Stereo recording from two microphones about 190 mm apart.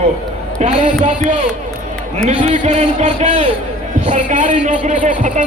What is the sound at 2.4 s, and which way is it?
A man's voice, 40° right (ahead or behind).